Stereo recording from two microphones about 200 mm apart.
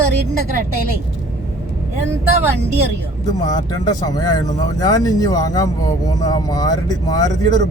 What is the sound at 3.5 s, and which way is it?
Speech, 20° left (ahead or behind).